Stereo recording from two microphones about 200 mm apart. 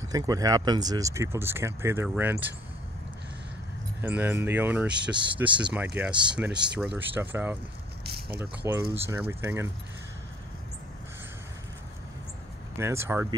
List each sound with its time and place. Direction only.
0.1 s speech: 20° right (ahead or behind)
4.0 s speech: 10° right (ahead or behind)
5.1 s speech: 25° right (ahead or behind)
6.0 s speech: 10° right (ahead or behind)
8.0 s a sound: 50° right (ahead or behind)
8.4 s speech: 15° right (ahead or behind)
12.7 s speech: 15° right (ahead or behind)